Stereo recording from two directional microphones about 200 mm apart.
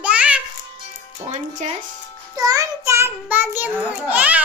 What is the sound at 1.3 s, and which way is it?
Speech, 40° right (ahead or behind).